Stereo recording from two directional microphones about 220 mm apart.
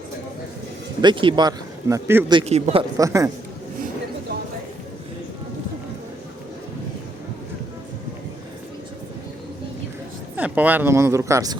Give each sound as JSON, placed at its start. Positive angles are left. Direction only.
{"t": 1.0, "sound": "speech", "side_deg": -20}
{"t": 2.3, "sound": "speech", "side_deg": -30}
{"t": 3.0, "sound": "a man's voice", "side_deg": -15}
{"t": 10.3, "sound": "speech", "side_deg": -5}